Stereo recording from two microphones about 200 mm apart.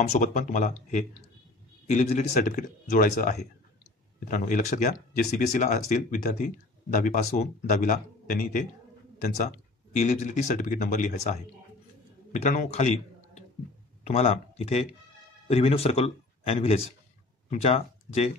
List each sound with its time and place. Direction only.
0.2 s speech: 40° left (ahead or behind)
12.4 s speech: 35° left (ahead or behind)
14.0 s speech: 30° left (ahead or behind)